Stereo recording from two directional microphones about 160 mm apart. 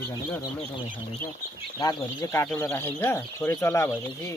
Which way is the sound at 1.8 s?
20° left (ahead or behind).